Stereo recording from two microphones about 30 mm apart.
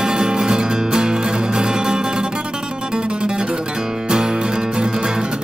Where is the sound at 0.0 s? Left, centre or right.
Right.